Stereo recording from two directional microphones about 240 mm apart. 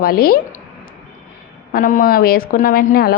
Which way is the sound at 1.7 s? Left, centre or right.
Left.